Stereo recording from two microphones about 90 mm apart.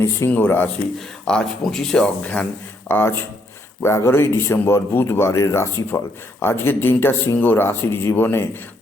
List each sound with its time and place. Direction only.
0.3 s speech: 20° left (ahead or behind)
0.9 s speech: 10° left (ahead or behind)
2.9 s speech: 25° left (ahead or behind)